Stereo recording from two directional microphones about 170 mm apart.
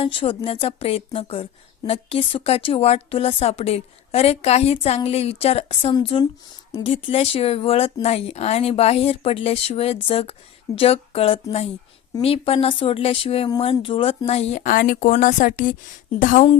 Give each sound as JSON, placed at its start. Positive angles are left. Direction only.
{"t": 0.0, "sound": "a woman's voice", "side_deg": 30}